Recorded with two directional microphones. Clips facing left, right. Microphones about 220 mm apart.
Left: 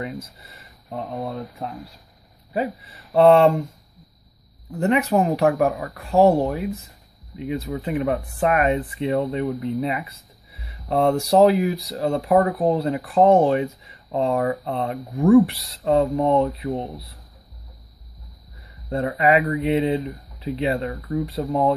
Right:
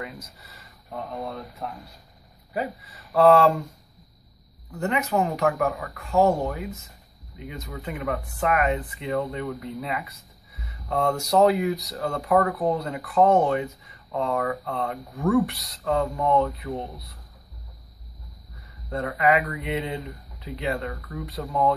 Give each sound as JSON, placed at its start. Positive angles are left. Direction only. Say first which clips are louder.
{"t": 0.0, "sound": "speech", "louder": "left 6 dB", "side_deg": 25}
{"t": 4.7, "sound": "speech", "louder": "left 5 dB", "side_deg": 30}
{"t": 18.9, "sound": "speech", "louder": "left 3 dB", "side_deg": 25}